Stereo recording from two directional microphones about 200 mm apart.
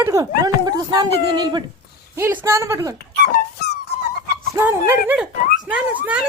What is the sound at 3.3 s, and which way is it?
Dog, 55° left (ahead or behind).